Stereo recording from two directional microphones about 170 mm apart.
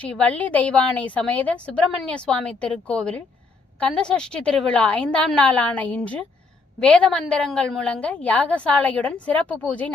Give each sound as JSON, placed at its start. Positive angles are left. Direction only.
{"t": 0.0, "sound": "a woman's voice", "side_deg": 10}